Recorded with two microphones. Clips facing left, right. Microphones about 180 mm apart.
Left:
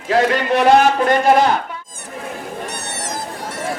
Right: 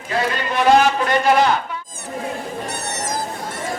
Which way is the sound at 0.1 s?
75° left (ahead or behind).